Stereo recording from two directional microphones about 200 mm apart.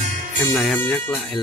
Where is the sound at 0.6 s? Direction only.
5° left (ahead or behind).